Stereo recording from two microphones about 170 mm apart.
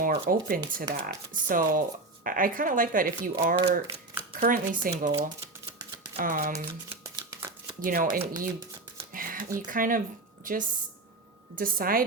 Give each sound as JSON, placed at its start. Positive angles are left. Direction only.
{"t": 0.0, "sound": "speech", "side_deg": -60}
{"t": 3.6, "sound": "speech", "side_deg": -30}
{"t": 4.4, "sound": "speech", "side_deg": -55}
{"t": 6.1, "sound": "speech", "side_deg": -60}
{"t": 7.0, "sound": "shuffling cards", "side_deg": -20}
{"t": 7.8, "sound": "speech", "side_deg": -55}
{"t": 9.1, "sound": "a sound", "side_deg": -55}
{"t": 9.6, "sound": "speech", "side_deg": -55}